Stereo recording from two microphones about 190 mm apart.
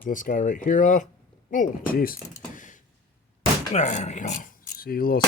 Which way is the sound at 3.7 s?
40° left (ahead or behind).